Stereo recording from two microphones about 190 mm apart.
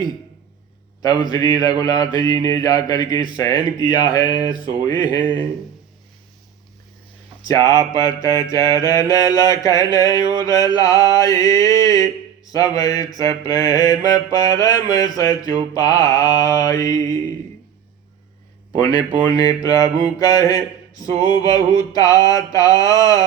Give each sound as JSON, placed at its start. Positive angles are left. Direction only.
{"t": 1.0, "sound": "mantra", "side_deg": 20}
{"t": 7.4, "sound": "mantra", "side_deg": 15}
{"t": 18.8, "sound": "mantra", "side_deg": 20}